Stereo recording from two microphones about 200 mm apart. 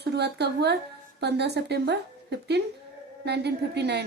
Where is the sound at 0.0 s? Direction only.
55° right (ahead or behind).